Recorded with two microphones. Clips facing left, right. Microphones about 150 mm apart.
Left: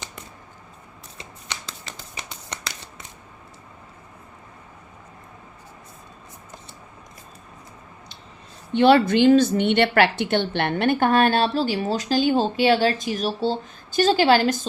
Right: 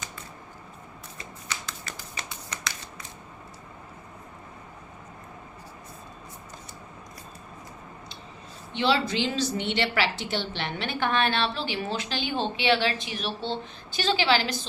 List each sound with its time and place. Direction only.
8.7 s a woman's voice: 55° left (ahead or behind)